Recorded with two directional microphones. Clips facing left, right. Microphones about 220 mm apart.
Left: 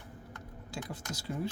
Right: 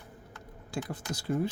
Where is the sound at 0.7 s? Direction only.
55° right (ahead or behind).